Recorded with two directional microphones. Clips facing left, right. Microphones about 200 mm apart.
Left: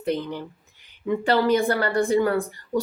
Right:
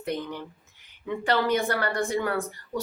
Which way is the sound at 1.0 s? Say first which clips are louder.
Left 5 dB; 30° left (ahead or behind).